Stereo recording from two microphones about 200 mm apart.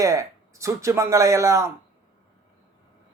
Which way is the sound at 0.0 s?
15° right (ahead or behind).